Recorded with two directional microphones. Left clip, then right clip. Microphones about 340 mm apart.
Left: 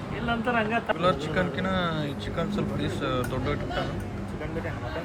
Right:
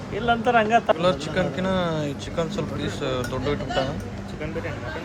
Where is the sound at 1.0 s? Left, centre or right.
Centre.